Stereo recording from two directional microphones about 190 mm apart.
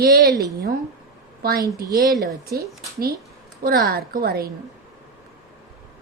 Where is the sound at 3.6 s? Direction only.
50° right (ahead or behind).